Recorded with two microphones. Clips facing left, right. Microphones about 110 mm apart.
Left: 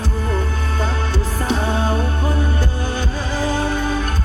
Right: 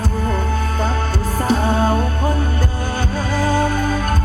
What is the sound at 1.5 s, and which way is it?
Music, 40° right (ahead or behind).